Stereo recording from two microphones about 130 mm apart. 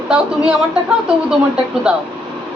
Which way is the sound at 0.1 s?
5° right (ahead or behind).